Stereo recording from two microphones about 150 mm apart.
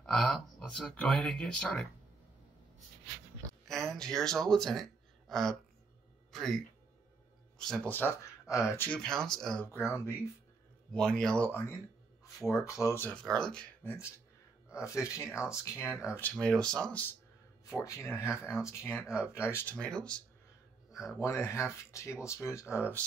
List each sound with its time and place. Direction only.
0.0 s speech: 5° left (ahead or behind)
3.6 s speech: centre (ahead or behind)
9.7 s speech: 20° left (ahead or behind)
10.9 s speech: 5° left (ahead or behind)
12.5 s speech: 5° right (ahead or behind)
12.8 s speech: 15° left (ahead or behind)
13.2 s speech: 5° left (ahead or behind)
14.7 s speech: 20° left (ahead or behind)
18.3 s speech: 5° right (ahead or behind)
18.6 s speech: 20° left (ahead or behind)
21.2 s speech: 20° left (ahead or behind)